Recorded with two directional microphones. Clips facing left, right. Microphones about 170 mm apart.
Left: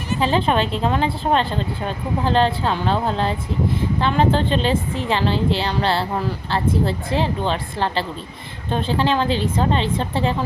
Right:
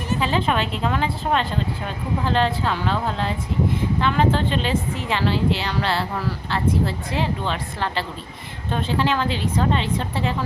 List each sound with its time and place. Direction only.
0.2 s speech: 30° left (ahead or behind)